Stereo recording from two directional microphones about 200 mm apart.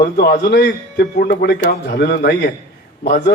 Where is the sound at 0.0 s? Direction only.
50° left (ahead or behind).